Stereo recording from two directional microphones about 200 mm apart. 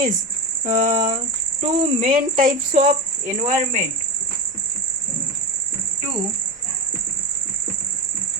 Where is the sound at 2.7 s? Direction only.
40° right (ahead or behind).